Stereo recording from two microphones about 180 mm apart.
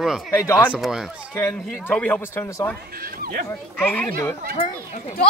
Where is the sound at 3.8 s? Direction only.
10° left (ahead or behind).